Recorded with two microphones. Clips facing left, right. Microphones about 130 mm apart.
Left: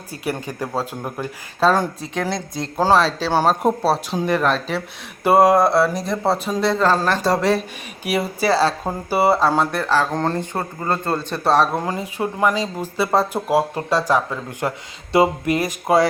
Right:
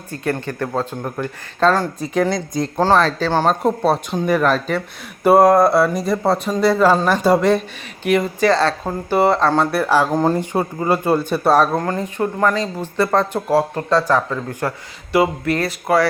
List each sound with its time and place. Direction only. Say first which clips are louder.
0.1 s speech: right 3 dB; 10° left (ahead or behind)
2.0 s speech: right 6 dB; centre (ahead or behind)
8.0 s speech: right 4 dB; 10° left (ahead or behind)
9.8 s speech: right 4 dB; 10° right (ahead or behind); by 16.0 s 15° left (ahead or behind)